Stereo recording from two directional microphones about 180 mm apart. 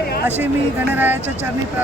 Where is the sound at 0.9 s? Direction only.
10° right (ahead or behind).